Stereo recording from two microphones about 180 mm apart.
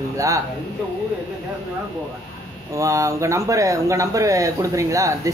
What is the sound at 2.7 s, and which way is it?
Speech, 15° right (ahead or behind).